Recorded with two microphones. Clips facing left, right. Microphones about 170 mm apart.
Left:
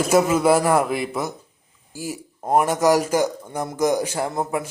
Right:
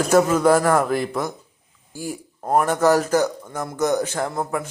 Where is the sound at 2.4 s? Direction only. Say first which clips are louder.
Even; 10° left (ahead or behind).